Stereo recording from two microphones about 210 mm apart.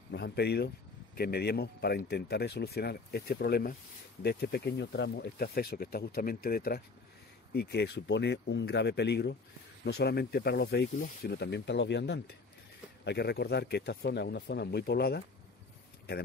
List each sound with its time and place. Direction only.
0.1 s speech: 50° left (ahead or behind)